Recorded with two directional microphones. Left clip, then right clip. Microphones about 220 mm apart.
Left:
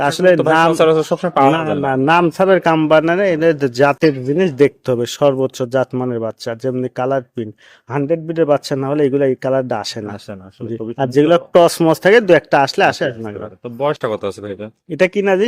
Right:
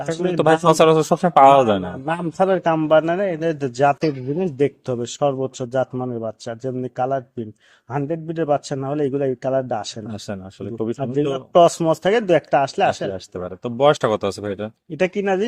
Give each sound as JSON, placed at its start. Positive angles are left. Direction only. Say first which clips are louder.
{"t": 0.3, "sound": "a man's voice", "louder": "left 2 dB", "side_deg": -10}
{"t": 1.9, "sound": "a man's voice", "louder": "left 12 dB", "side_deg": 50}
{"t": 11.0, "sound": "a man's voice", "louder": "left 12 dB", "side_deg": 50}
{"t": 13.7, "sound": "a man's voice", "louder": "right 2 dB", "side_deg": -15}
{"t": 14.8, "sound": "a man's voice", "louder": "left 6 dB", "side_deg": 50}